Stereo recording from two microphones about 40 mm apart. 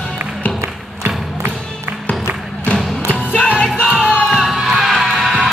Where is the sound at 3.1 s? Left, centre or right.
Left.